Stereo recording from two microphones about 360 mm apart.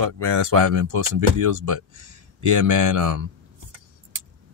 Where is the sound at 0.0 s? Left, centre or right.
Right.